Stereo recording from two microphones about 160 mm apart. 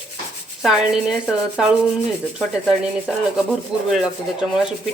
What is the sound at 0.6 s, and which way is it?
Speech, 5° right (ahead or behind).